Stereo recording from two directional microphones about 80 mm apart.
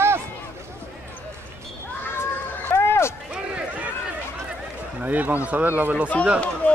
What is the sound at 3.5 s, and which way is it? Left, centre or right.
Run, centre.